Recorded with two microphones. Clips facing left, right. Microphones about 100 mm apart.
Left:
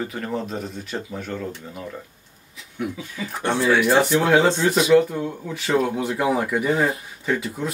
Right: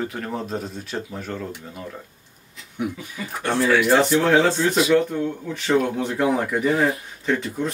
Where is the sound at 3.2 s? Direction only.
5° right (ahead or behind).